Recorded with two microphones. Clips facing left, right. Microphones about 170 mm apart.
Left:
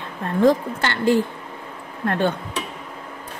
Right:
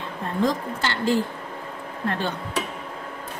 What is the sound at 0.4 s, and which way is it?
Speech, 60° left (ahead or behind).